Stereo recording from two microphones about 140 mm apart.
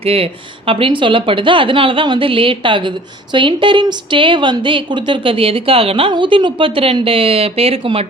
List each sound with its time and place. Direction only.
0.0 s a woman's voice: 45° right (ahead or behind)